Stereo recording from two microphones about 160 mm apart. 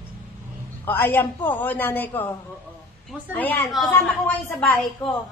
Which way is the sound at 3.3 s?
10° left (ahead or behind).